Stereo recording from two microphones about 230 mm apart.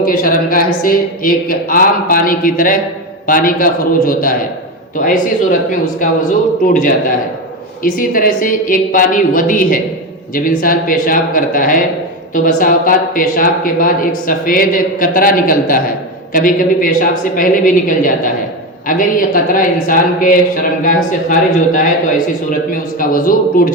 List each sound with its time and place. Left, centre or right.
0.0 s speech: left
7.9 s speech: left
23.0 s speech: left